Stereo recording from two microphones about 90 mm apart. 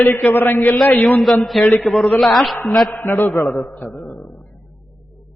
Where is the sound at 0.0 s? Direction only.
20° left (ahead or behind).